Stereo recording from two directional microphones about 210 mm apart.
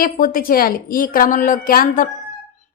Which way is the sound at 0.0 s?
40° left (ahead or behind).